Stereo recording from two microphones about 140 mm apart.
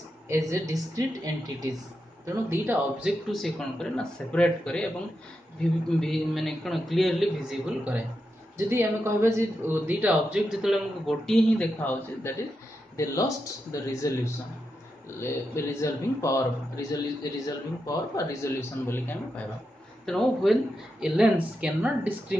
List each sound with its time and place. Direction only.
0.3 s a woman's voice: 20° right (ahead or behind)
2.5 s a man's voice: 15° right (ahead or behind); by 19.4 s 15° left (ahead or behind)
20.1 s speech: 5° left (ahead or behind)
21.0 s a woman's voice: 10° right (ahead or behind)